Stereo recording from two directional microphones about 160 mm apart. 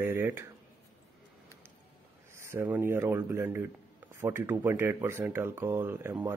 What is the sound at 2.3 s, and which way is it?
Speech, 15° right (ahead or behind).